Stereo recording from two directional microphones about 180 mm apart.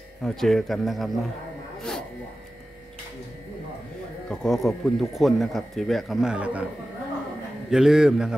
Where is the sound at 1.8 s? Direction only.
5° left (ahead or behind).